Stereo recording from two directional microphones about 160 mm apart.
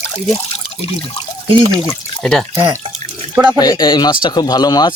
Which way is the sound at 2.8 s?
40° right (ahead or behind).